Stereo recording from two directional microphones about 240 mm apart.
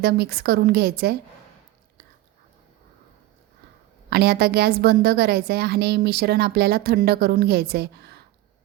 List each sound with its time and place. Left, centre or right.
0.0 s a woman's voice: right
4.1 s a woman's voice: right